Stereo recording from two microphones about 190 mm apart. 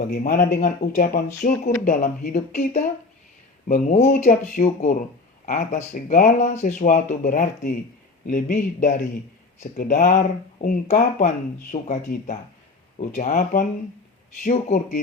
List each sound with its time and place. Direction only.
0.1 s speech: 45° left (ahead or behind)